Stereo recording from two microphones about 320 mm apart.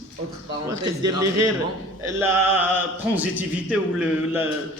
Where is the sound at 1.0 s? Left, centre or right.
Right.